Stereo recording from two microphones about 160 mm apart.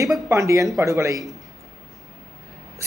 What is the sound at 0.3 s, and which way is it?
Speech, 20° right (ahead or behind).